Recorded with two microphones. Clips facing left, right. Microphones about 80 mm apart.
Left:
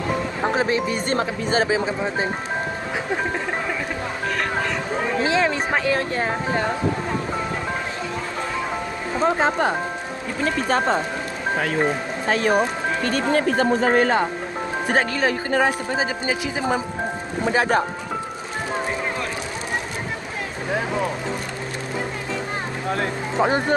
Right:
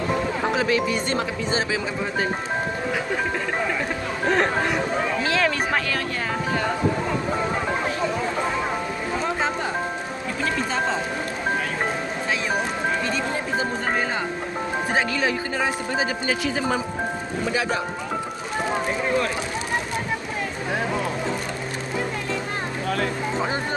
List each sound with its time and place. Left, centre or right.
0.5 s speech: left
5.2 s speech: left
9.2 s speech: left
12.3 s speech: left
15.1 s speech: left
15.9 s speech: left
17.5 s speech: left